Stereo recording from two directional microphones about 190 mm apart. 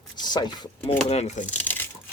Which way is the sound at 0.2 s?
20° left (ahead or behind).